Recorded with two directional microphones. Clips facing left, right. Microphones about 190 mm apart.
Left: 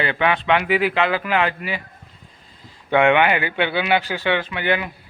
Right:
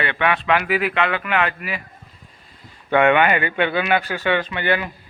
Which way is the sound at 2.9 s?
15° left (ahead or behind).